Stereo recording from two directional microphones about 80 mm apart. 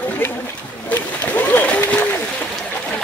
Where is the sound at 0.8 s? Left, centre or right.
Left.